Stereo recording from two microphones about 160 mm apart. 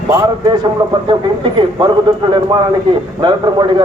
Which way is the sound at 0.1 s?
20° right (ahead or behind).